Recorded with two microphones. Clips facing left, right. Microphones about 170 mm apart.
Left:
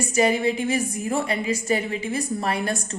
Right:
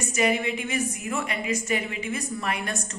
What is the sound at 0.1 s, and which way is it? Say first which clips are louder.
A woman's voice: left 4 dB; 35° left (ahead or behind).